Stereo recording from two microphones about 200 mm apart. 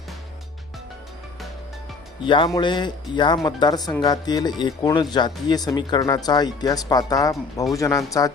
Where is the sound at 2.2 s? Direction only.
25° left (ahead or behind).